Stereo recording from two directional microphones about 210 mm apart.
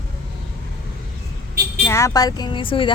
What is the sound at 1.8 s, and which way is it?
Speech, 15° left (ahead or behind).